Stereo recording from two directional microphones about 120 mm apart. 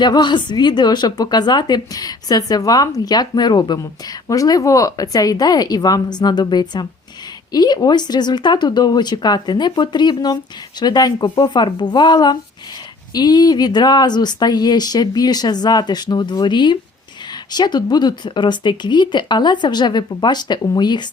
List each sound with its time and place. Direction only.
0.0 s a woman's voice: 40° left (ahead or behind)